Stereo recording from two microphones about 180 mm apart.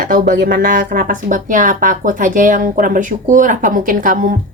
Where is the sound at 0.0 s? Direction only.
50° right (ahead or behind).